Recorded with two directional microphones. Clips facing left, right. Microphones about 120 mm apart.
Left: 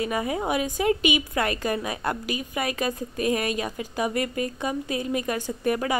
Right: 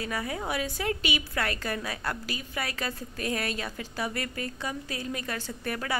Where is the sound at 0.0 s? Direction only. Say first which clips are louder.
Left 6 dB; 20° left (ahead or behind).